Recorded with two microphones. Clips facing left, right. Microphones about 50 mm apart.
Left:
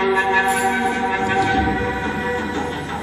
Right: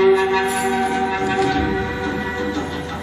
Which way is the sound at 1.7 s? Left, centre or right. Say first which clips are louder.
Left 1 dB; centre.